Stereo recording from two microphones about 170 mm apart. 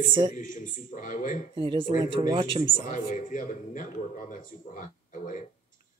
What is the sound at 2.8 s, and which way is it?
A man's voice, 50° left (ahead or behind).